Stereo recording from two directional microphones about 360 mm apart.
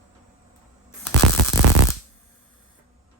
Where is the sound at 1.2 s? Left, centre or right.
Right.